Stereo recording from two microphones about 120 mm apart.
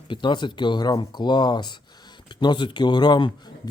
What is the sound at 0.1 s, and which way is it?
Speech, 40° left (ahead or behind).